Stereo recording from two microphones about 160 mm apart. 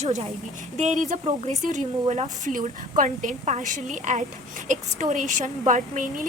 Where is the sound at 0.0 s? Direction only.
45° right (ahead or behind).